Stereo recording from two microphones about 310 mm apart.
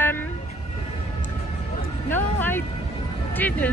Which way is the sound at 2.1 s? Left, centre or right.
Centre.